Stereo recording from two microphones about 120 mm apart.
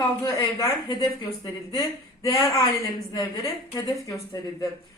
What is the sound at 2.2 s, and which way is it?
A woman's voice, 25° left (ahead or behind).